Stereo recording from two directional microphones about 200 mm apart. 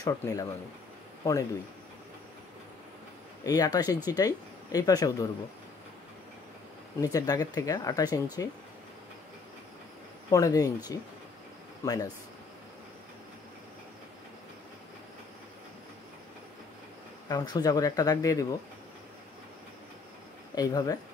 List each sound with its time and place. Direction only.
0.0 s speech: 20° left (ahead or behind)
3.4 s speech: 20° left (ahead or behind)
7.0 s speech: 20° left (ahead or behind)
10.3 s speech: 15° left (ahead or behind)
11.8 s speech: 20° left (ahead or behind)
17.3 s speech: 20° left (ahead or behind)
20.5 s speech: 20° left (ahead or behind)